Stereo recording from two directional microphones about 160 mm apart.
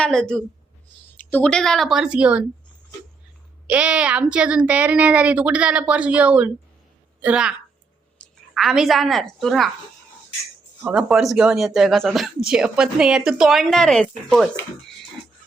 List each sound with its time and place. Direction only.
0.0 s speech: 5° left (ahead or behind)
3.7 s speech: 5° right (ahead or behind)
8.2 s a sound: 5° left (ahead or behind)
8.5 s speech: centre (ahead or behind)
10.8 s speech: 5° right (ahead or behind)